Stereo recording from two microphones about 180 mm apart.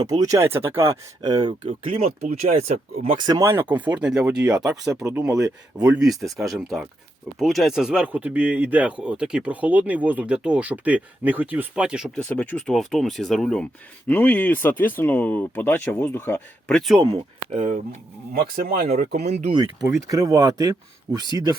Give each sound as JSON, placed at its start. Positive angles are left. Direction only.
{"t": 0.0, "sound": "speech", "side_deg": -20}
{"t": 3.2, "sound": "speech", "side_deg": -20}
{"t": 12.2, "sound": "speech", "side_deg": 5}
{"t": 17.0, "sound": "speech", "side_deg": -30}
{"t": 18.5, "sound": "speech", "side_deg": -55}
{"t": 19.1, "sound": "speech", "side_deg": -40}
{"t": 19.5, "sound": "speech", "side_deg": -20}